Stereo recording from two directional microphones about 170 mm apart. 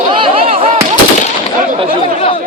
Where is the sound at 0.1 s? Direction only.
30° right (ahead or behind).